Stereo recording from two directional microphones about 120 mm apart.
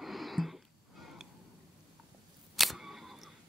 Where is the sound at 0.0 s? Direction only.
Centre (ahead or behind).